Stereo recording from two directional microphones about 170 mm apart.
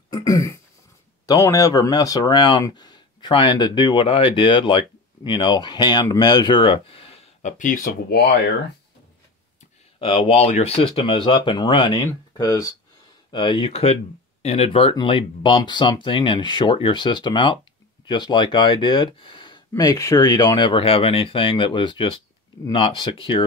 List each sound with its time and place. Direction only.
0.1 s throat clearing: 20° left (ahead or behind)
1.2 s speech: 20° left (ahead or behind)
7.5 s speech: 50° left (ahead or behind)
9.9 s speech: 30° left (ahead or behind)